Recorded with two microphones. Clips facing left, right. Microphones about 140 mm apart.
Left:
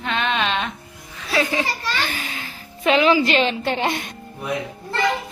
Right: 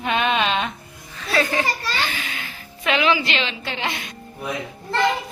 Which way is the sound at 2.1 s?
35° left (ahead or behind).